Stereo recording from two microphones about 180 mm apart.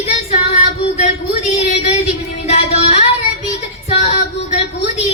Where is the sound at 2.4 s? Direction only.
35° left (ahead or behind).